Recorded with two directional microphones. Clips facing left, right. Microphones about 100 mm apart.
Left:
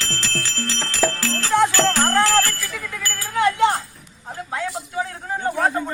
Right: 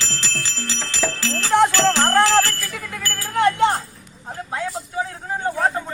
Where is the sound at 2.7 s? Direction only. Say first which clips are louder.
Even; 45° right (ahead or behind).